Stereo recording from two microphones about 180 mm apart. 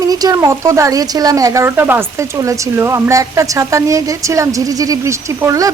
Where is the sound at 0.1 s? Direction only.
20° right (ahead or behind).